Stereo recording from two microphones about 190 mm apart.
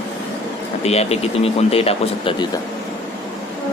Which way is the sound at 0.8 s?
35° left (ahead or behind).